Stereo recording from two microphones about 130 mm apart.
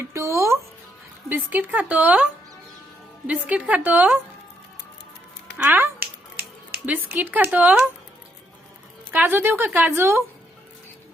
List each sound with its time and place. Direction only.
0.0 s speech: 20° right (ahead or behind)
5.6 s finger snapping: 15° right (ahead or behind)
6.8 s speech: 15° right (ahead or behind)
9.1 s speech: 15° right (ahead or behind)